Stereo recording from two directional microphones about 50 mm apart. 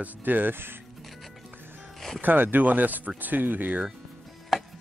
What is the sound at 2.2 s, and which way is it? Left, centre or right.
Speech, right.